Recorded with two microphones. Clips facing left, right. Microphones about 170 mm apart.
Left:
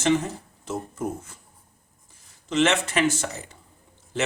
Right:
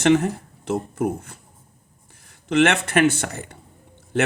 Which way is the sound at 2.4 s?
60° right (ahead or behind).